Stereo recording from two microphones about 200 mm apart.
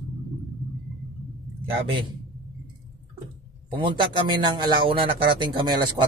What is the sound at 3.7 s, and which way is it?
A man's voice, 25° right (ahead or behind).